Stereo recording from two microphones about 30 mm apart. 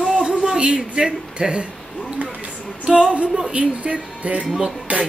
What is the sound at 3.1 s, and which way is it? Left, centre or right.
Speech, right.